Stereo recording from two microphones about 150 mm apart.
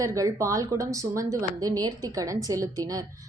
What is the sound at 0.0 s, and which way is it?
Speech, 20° right (ahead or behind).